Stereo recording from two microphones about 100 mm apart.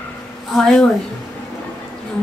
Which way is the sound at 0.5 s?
5° left (ahead or behind).